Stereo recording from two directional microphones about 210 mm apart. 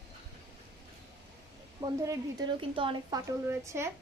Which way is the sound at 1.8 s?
15° right (ahead or behind).